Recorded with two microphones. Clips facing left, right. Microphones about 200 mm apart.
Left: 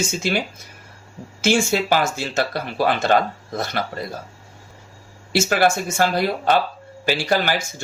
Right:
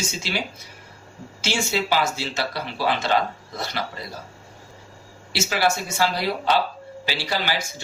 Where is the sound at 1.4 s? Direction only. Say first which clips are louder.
Left 6 dB; 50° left (ahead or behind).